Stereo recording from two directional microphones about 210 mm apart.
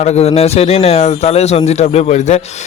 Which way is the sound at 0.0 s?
30° left (ahead or behind).